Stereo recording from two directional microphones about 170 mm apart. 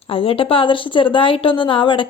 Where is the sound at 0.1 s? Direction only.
35° left (ahead or behind).